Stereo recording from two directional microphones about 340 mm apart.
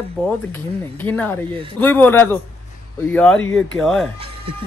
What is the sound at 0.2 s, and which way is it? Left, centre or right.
Speech, centre.